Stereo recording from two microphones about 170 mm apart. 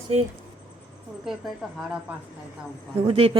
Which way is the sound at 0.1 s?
40° right (ahead or behind).